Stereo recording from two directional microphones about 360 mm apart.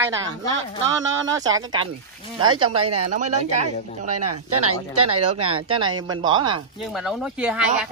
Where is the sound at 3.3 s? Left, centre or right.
Centre.